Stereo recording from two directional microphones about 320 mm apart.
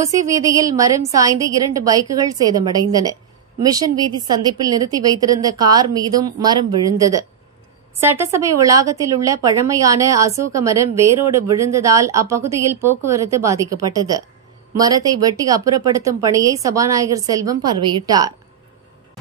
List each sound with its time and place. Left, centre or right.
0.0 s a woman's voice: centre
14.8 s a woman's voice: centre